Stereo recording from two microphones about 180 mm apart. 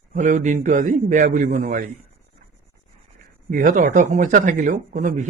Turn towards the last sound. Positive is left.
turn(degrees=-45)  # may be behind; listen again after turning